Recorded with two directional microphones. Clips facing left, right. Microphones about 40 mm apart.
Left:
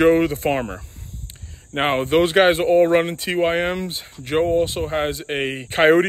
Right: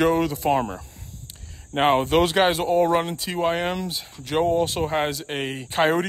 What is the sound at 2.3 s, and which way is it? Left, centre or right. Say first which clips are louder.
Speech: left 5 dB; left.